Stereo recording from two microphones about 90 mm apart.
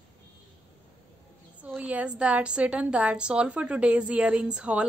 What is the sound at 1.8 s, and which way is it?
A woman's voice, 15° right (ahead or behind).